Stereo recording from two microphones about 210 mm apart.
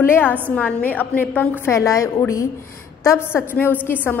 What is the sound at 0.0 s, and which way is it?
A woman's voice, 10° left (ahead or behind).